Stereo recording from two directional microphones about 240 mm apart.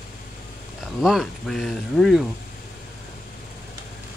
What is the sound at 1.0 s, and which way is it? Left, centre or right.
Speech, centre.